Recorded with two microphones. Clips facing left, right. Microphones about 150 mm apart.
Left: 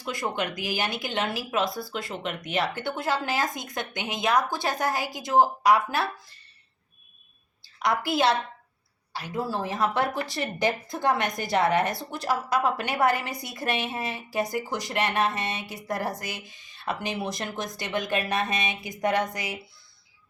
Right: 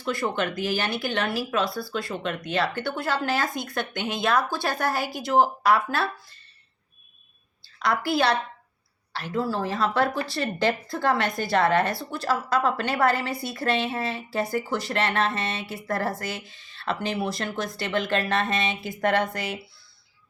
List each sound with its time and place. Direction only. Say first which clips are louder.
0.0 s a woman's voice: right 3 dB; 15° left (ahead or behind)
7.8 s a woman's voice: right 1 dB; 20° left (ahead or behind)